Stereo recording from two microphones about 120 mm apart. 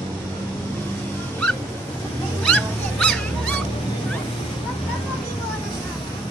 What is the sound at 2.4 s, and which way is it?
Dog, 10° left (ahead or behind).